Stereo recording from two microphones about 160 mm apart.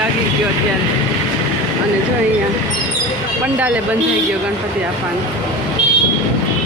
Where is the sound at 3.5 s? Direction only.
10° right (ahead or behind).